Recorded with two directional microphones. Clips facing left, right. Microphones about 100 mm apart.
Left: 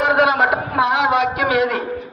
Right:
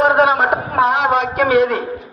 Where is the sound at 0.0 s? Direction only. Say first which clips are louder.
Right 2 dB; 35° right (ahead or behind).